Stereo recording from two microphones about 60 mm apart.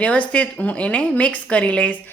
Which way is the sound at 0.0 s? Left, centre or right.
Left.